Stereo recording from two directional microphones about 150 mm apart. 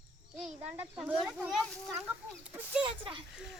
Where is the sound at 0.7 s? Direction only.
10° right (ahead or behind).